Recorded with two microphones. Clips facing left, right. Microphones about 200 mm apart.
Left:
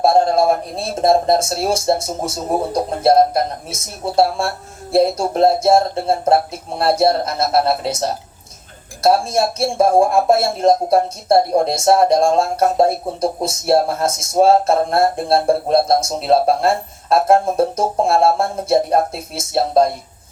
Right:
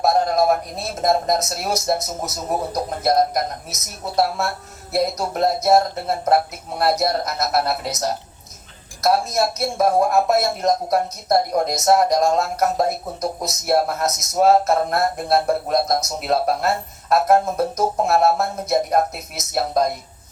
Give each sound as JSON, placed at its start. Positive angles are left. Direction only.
{"t": 0.0, "sound": "speech", "side_deg": 30}